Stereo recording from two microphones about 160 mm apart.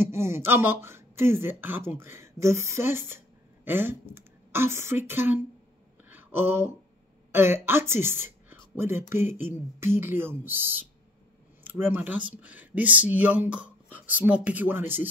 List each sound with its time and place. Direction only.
0.0 s speech: 15° right (ahead or behind)
6.0 s a sound: 15° right (ahead or behind)
7.3 s a woman's voice: 15° right (ahead or behind)